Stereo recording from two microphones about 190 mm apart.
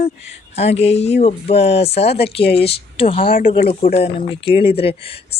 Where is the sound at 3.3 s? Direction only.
50° left (ahead or behind).